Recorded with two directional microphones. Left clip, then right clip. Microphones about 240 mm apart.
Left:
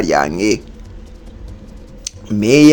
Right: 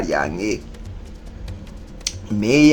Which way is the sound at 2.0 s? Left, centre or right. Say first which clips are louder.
Left 4 dB; left.